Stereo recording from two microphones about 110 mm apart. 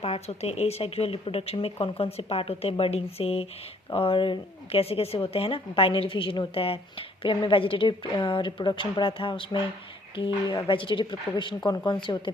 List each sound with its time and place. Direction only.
0.0 s a woman's voice: 70° left (ahead or behind); by 12.3 s 50° left (ahead or behind)